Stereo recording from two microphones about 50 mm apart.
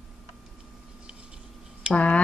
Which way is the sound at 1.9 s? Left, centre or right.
Left.